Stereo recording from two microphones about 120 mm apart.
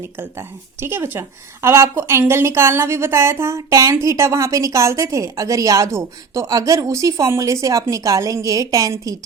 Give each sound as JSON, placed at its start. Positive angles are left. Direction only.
{"t": 0.0, "sound": "a woman's voice", "side_deg": -20}